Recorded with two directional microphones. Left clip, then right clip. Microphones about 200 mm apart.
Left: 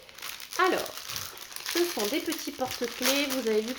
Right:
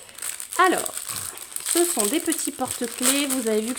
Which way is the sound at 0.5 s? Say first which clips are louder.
Right 6 dB; 55° right (ahead or behind).